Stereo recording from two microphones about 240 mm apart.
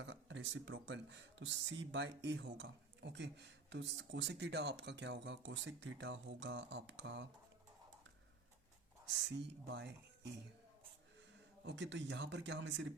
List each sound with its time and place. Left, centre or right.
0.0 s speech: right
9.2 s speech: right
11.6 s speech: right